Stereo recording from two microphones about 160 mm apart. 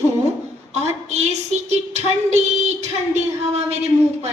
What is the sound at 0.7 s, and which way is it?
A woman's voice, 45° right (ahead or behind).